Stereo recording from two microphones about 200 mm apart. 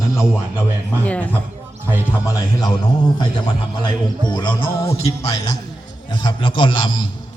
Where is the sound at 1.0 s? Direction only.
5° left (ahead or behind).